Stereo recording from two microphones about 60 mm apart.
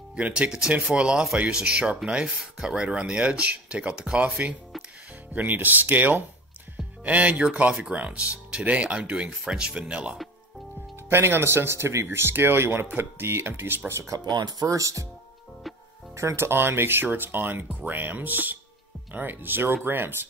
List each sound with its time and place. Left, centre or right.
0.1 s speech: centre
11.1 s speech: right
13.8 s speech: right
14.1 s speech: right
16.2 s speech: right